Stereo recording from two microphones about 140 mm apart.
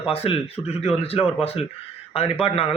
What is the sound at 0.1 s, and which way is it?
A man's voice, 45° left (ahead or behind).